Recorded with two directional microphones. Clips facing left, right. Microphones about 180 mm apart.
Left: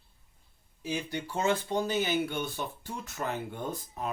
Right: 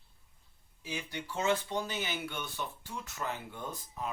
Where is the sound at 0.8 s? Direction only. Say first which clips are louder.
Left 6 dB; 45° left (ahead or behind).